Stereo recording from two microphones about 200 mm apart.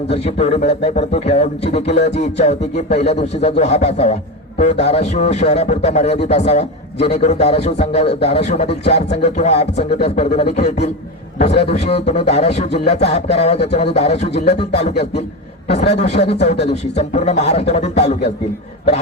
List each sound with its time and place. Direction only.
0.1 s a man's voice: 30° left (ahead or behind)
15.9 s a man's voice: 35° left (ahead or behind)